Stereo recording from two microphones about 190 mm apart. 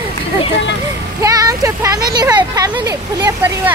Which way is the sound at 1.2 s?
15° right (ahead or behind).